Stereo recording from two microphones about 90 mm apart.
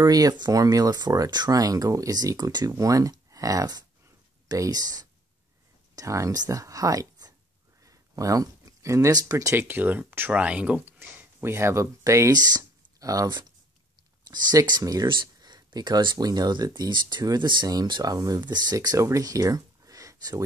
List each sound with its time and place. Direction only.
0.0 s speech: 45° right (ahead or behind)
5.9 s speech: 35° right (ahead or behind)
9.6 s speech: 20° right (ahead or behind); by 18.1 s 55° right (ahead or behind)
18.1 s speech: 45° right (ahead or behind)